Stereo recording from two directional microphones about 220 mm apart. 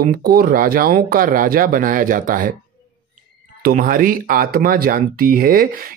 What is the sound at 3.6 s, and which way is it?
Speech, 40° right (ahead or behind).